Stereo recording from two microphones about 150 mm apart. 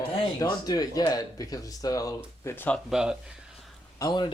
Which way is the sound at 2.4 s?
15° left (ahead or behind).